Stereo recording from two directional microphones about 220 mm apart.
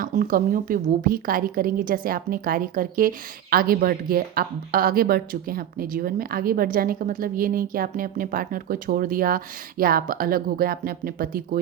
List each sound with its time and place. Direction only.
0.0 s a woman's voice: 40° right (ahead or behind)